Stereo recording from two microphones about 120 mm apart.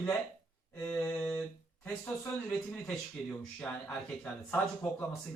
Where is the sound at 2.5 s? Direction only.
10° left (ahead or behind).